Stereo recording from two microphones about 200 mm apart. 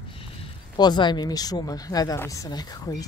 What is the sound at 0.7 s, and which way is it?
A woman's voice, 20° left (ahead or behind).